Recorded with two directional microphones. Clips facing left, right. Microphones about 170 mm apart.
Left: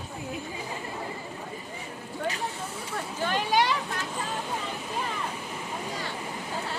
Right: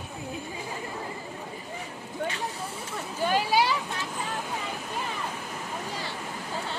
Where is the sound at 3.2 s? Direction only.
5° right (ahead or behind).